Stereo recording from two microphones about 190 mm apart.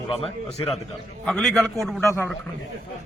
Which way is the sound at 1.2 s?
Centre (ahead or behind).